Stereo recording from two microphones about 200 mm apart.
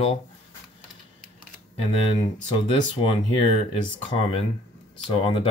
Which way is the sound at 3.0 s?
25° left (ahead or behind).